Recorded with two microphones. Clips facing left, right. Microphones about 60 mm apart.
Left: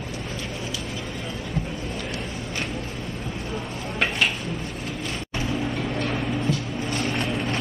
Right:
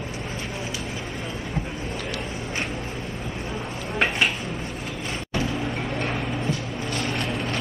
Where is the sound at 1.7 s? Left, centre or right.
Right.